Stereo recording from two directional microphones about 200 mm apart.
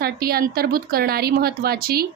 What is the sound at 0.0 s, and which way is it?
Speech, 50° right (ahead or behind).